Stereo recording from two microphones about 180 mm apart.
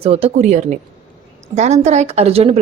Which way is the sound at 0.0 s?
35° right (ahead or behind).